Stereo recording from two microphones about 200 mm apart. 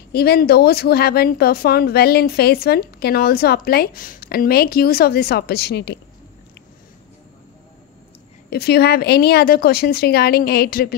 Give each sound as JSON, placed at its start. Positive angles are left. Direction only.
{"t": 0.1, "sound": "speech", "side_deg": 50}
{"t": 8.5, "sound": "speech", "side_deg": 55}